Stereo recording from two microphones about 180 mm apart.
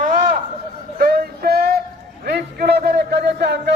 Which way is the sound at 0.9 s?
60° right (ahead or behind).